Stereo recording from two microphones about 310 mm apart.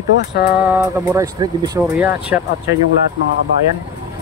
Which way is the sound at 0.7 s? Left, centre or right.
Centre.